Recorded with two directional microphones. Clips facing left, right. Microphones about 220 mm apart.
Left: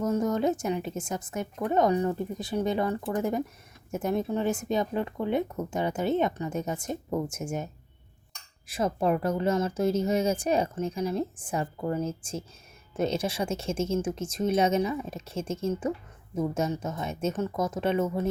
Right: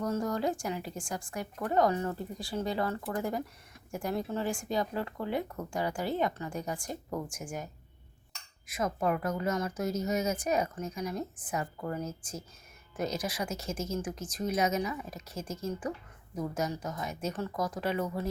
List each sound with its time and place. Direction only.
0.0 s speech: 20° left (ahead or behind)